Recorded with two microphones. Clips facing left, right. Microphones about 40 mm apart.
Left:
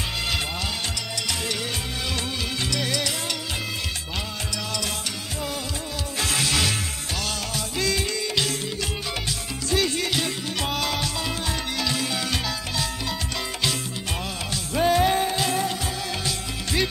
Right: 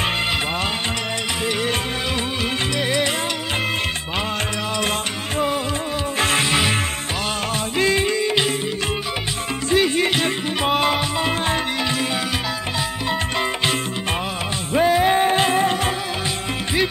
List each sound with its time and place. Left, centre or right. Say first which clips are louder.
2.8 s music: right 8 dB; right
6.1 s music: right 5 dB; right
7.7 s music: right 7 dB; right
9.7 s music: right 6 dB; right
14.7 s music: right 3 dB; right
15.0 s music: right 6 dB; right